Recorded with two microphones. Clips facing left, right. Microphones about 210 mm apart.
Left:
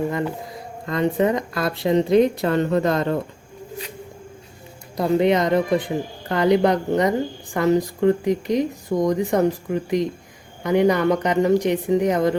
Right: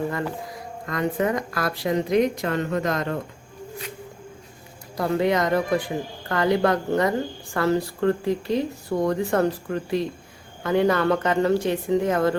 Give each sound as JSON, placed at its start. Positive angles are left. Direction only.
{"t": 0.1, "sound": "speech", "side_deg": 20}
{"t": 4.9, "sound": "speech", "side_deg": 20}